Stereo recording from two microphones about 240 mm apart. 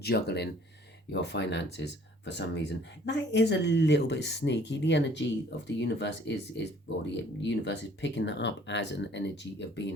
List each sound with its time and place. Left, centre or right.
0.0 s speech: left